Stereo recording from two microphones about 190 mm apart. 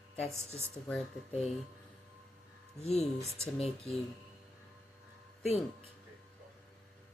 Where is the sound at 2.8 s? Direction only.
35° left (ahead or behind).